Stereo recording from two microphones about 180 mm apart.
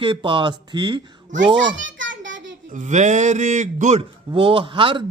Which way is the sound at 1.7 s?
90° right.